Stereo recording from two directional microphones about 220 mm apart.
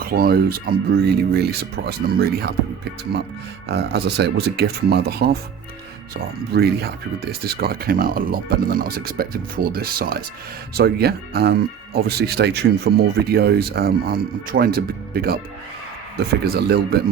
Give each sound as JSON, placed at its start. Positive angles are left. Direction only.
{"t": 0.0, "sound": "speech", "side_deg": -40}
{"t": 3.7, "sound": "speech", "side_deg": -50}
{"t": 6.5, "sound": "speech", "side_deg": -45}
{"t": 16.4, "sound": "speech", "side_deg": -45}